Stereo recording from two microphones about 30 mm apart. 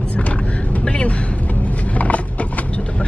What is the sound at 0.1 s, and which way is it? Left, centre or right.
Vehicle, left.